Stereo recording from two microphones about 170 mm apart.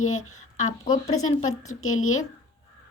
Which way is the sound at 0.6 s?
45° left (ahead or behind).